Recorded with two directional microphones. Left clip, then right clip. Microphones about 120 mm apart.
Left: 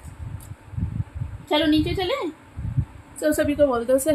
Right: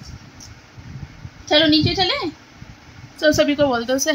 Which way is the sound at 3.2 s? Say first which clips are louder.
Right 4 dB; 30° right (ahead or behind).